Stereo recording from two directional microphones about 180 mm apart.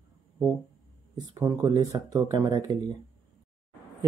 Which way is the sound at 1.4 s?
20° right (ahead or behind).